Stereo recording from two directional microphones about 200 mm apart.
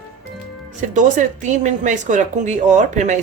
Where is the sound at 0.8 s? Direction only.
40° right (ahead or behind).